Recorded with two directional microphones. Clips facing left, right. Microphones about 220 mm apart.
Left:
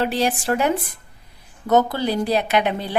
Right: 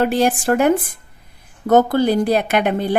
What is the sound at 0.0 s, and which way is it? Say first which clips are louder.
Speech: right 5 dB; 50° right (ahead or behind).